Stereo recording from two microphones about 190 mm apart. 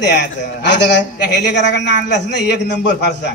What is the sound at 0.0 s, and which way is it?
A man's voice, 65° left (ahead or behind).